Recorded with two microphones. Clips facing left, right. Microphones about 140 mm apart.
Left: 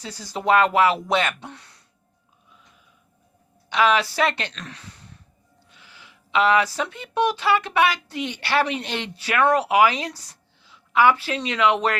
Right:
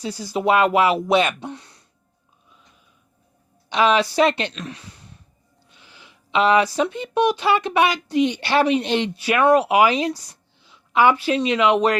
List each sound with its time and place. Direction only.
0.0 s speech: 10° right (ahead or behind)
3.7 s speech: 20° right (ahead or behind)